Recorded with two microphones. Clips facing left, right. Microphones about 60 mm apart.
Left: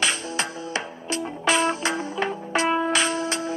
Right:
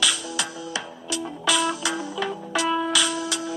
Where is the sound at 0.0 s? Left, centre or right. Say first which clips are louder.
Left 1 dB; left.